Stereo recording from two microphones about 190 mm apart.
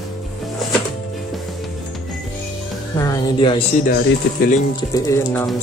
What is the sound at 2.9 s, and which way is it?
Music, 20° left (ahead or behind).